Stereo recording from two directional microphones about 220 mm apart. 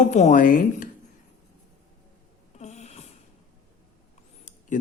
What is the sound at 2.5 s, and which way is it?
Wheeze, 30° left (ahead or behind).